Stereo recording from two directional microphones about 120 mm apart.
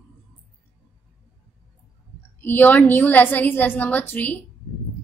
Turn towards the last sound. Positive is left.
turn(degrees=15)  # may be behind; listen again after turning